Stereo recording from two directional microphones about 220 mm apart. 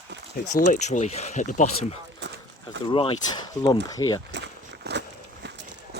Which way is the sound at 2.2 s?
55° right (ahead or behind).